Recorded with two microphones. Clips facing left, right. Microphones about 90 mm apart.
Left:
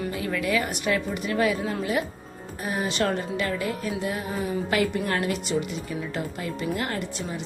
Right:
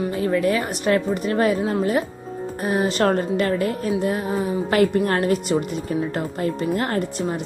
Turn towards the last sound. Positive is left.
turn(degrees=-45)  # may be behind; listen again after turning